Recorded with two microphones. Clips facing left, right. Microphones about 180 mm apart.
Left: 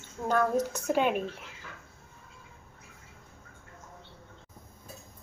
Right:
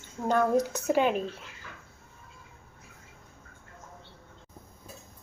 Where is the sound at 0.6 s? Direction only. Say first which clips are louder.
Right 2 dB; 5° right (ahead or behind).